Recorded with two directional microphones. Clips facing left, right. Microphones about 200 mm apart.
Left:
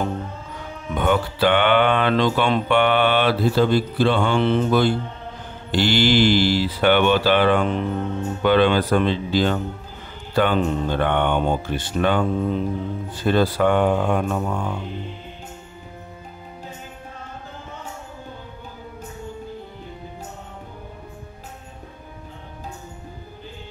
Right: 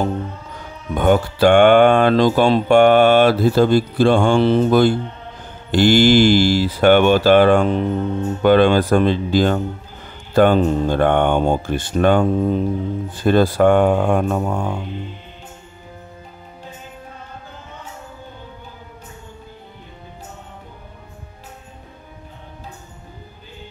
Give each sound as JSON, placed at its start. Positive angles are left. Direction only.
{"t": 0.9, "sound": "speech", "side_deg": -45}